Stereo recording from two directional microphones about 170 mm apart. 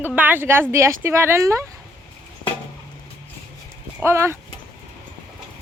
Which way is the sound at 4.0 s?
15° right (ahead or behind).